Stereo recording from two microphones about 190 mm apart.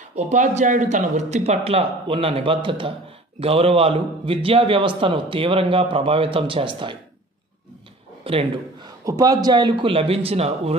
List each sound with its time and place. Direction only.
0.1 s a man's voice: 40° right (ahead or behind)
8.2 s a sound: 30° right (ahead or behind)
9.0 s a man's voice: 20° right (ahead or behind)